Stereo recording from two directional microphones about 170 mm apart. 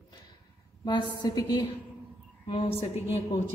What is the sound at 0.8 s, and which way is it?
A woman's voice, 25° left (ahead or behind).